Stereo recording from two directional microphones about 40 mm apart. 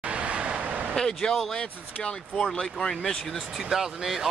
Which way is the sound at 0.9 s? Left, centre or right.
Centre.